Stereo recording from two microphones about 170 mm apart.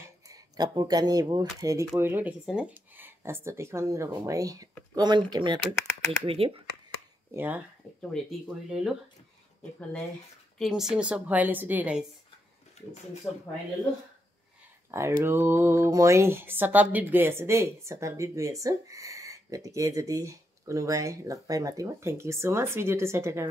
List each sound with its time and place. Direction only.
0.3 s speech: 25° right (ahead or behind)
7.3 s speech: 10° right (ahead or behind)
8.0 s speech: centre (ahead or behind)
13.3 s speech: centre (ahead or behind)
14.9 s speech: 15° right (ahead or behind)